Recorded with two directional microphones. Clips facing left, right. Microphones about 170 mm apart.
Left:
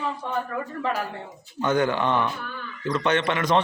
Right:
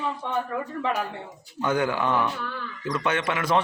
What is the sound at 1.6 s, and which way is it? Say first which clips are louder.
A man's voice: left 2 dB; 5° right (ahead or behind).